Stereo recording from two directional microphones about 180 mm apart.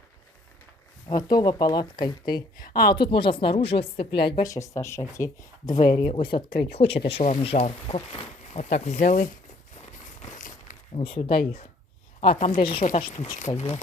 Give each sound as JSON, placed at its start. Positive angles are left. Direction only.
{"t": 1.0, "sound": "speech", "side_deg": 20}
{"t": 4.4, "sound": "speech", "side_deg": 15}
{"t": 10.2, "sound": "a sound", "side_deg": 45}
{"t": 10.9, "sound": "speech", "side_deg": 30}